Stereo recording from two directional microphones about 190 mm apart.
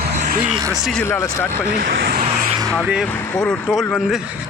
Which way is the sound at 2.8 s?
5° right (ahead or behind).